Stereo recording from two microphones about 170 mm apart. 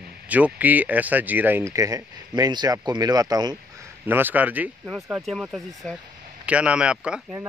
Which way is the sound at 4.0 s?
10° right (ahead or behind).